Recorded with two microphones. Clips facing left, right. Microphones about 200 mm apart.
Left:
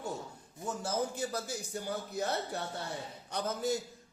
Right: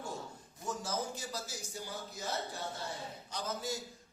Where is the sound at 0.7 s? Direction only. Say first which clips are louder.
Left 3 dB; 60° left (ahead or behind).